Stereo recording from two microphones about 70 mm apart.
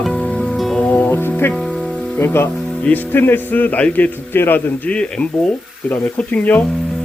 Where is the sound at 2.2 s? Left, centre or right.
Left.